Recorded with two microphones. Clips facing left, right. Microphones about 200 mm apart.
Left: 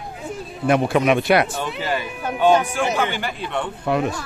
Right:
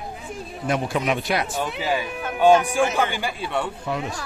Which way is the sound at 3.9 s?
60° left (ahead or behind).